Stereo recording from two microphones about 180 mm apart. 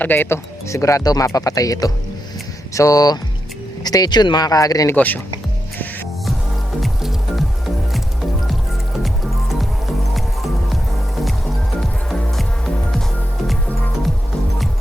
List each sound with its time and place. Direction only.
0.0 s speech: 10° left (ahead or behind)
6.8 s music: centre (ahead or behind)
9.0 s music: centre (ahead or behind)
11.8 s music: centre (ahead or behind)